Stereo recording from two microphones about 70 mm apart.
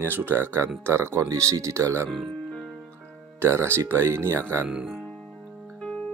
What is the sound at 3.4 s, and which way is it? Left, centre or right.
Speech, right.